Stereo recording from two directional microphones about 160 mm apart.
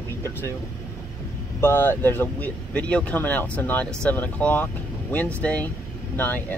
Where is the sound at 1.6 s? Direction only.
15° left (ahead or behind).